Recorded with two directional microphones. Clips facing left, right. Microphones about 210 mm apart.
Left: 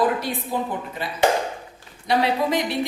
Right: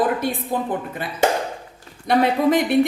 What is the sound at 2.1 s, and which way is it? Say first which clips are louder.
Speech: right 4 dB; 50° right (ahead or behind).